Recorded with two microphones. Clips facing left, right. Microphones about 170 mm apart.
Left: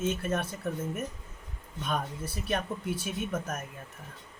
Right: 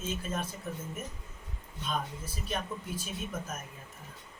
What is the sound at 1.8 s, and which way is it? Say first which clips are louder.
Speech: left 3 dB; 65° left (ahead or behind).